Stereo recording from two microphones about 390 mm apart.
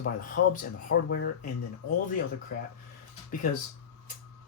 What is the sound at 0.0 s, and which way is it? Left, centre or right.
Speech, left.